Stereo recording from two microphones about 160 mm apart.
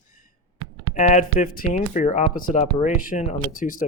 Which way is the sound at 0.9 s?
50° left (ahead or behind).